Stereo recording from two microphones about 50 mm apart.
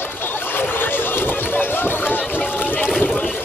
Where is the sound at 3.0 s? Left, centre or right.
Left.